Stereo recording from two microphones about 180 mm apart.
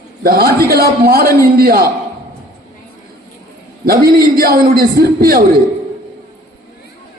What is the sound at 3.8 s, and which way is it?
A man's voice, 55° right (ahead or behind).